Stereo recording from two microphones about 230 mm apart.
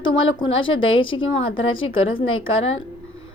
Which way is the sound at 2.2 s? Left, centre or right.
Left.